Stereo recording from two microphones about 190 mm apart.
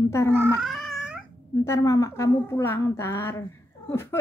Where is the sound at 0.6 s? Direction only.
Centre (ahead or behind).